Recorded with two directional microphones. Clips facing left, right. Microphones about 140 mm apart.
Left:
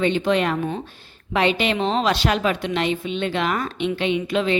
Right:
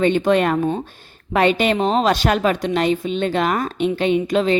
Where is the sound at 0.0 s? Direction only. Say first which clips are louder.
Right 4 dB; 45° right (ahead or behind).